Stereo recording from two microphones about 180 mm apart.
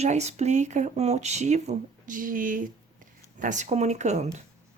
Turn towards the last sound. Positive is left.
turn(degrees=-40)  # may be behind; listen again after turning